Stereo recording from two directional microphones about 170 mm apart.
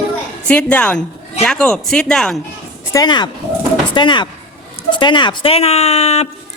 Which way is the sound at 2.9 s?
20° left (ahead or behind).